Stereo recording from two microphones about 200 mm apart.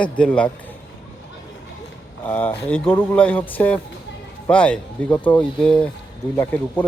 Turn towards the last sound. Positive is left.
turn(degrees=10)  # may be behind; listen again after turning